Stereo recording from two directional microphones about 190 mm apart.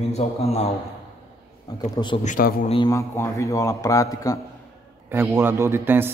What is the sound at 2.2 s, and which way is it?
Speech, 45° left (ahead or behind).